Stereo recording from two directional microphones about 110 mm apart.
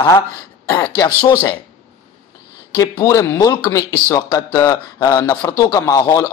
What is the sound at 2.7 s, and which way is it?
Speech, 30° left (ahead or behind).